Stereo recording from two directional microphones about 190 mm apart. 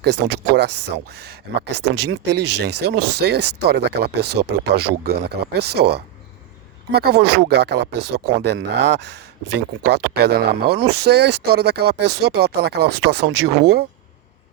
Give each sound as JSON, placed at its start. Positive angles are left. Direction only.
{"t": 0.0, "sound": "speech", "side_deg": -60}